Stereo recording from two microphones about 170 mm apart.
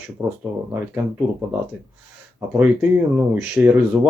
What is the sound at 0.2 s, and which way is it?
Speech, 20° right (ahead or behind).